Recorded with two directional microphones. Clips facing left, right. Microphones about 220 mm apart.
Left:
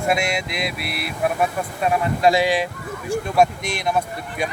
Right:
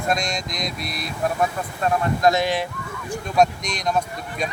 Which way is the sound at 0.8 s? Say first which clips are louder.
Left 2 dB; 65° left (ahead or behind).